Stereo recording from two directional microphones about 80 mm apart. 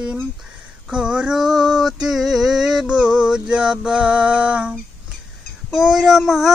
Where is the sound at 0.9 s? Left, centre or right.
Centre.